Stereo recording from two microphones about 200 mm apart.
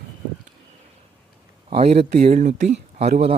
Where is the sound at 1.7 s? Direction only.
30° right (ahead or behind).